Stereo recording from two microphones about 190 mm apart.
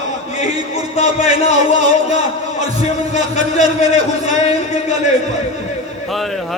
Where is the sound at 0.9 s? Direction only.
35° left (ahead or behind).